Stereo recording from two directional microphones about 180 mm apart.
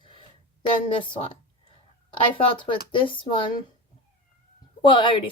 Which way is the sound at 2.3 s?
30° left (ahead or behind).